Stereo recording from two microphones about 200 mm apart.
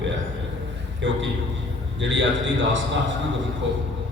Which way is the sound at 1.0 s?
65° right (ahead or behind).